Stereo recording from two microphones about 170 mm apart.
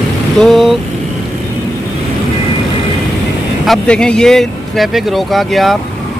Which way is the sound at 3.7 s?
5° left (ahead or behind).